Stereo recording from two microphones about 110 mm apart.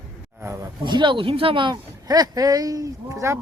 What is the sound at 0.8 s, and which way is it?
Speech, 45° right (ahead or behind).